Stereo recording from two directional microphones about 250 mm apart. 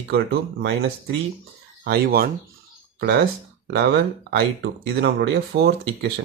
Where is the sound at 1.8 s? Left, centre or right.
Right.